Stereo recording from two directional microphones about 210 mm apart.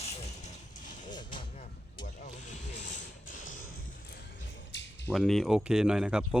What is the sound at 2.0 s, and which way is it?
Vehicle, 35° left (ahead or behind).